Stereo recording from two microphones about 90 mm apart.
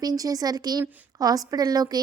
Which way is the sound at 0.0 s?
45° right (ahead or behind).